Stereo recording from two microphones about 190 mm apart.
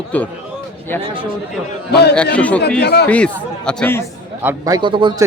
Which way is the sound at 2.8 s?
60° left (ahead or behind).